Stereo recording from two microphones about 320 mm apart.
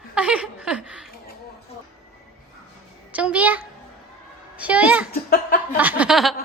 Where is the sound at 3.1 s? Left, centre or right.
Centre.